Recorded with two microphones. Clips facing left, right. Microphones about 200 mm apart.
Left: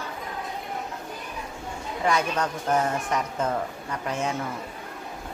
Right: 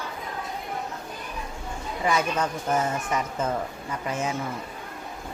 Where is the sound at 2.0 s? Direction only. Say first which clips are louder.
Even; 5° right (ahead or behind).